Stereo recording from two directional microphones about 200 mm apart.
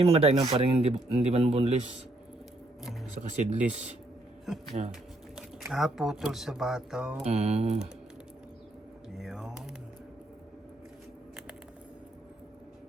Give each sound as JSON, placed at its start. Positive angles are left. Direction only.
{"t": 0.0, "sound": "speech", "side_deg": -30}
{"t": 3.2, "sound": "speech", "side_deg": -35}
{"t": 5.4, "sound": "speech", "side_deg": 0}
{"t": 7.3, "sound": "speech", "side_deg": -30}
{"t": 9.1, "sound": "speech", "side_deg": 0}